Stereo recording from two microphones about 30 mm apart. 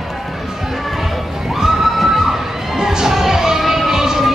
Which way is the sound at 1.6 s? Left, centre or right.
Centre.